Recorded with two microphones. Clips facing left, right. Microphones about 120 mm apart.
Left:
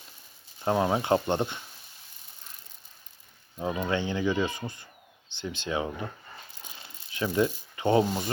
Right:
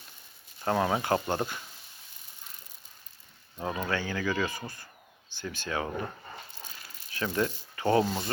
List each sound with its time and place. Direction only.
0.6 s speech: 15° left (ahead or behind)
3.6 s speech: 20° left (ahead or behind)
6.7 s crumpling: 20° left (ahead or behind)